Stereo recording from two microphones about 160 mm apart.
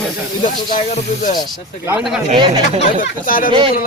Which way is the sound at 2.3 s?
30° right (ahead or behind).